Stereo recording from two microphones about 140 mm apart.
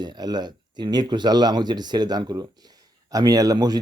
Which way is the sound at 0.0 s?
30° right (ahead or behind).